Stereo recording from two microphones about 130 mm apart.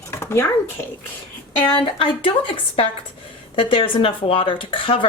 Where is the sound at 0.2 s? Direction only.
20° left (ahead or behind).